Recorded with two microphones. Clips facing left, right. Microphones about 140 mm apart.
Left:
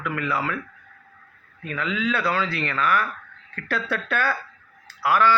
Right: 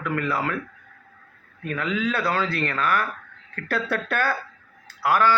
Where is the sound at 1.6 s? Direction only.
50° right (ahead or behind).